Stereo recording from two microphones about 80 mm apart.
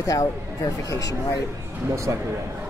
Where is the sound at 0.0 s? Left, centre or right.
Left.